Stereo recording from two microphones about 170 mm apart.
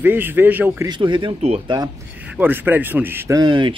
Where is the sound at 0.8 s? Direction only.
30° right (ahead or behind).